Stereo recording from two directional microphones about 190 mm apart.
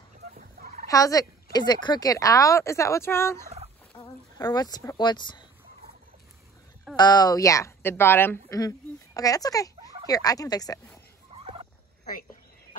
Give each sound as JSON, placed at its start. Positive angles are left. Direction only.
{"t": 0.3, "sound": "fowl", "side_deg": -50}
{"t": 0.8, "sound": "a woman's voice", "side_deg": 20}
{"t": 7.0, "sound": "speech", "side_deg": 20}
{"t": 11.3, "sound": "turkey", "side_deg": -30}
{"t": 12.0, "sound": "a sound", "side_deg": 45}